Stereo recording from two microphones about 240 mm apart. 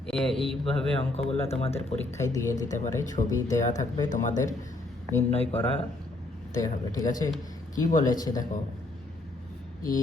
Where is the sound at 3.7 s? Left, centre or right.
Left.